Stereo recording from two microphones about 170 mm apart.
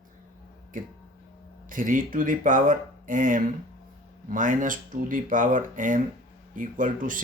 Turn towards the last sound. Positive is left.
turn(degrees=-50)  # may be behind; listen again after turning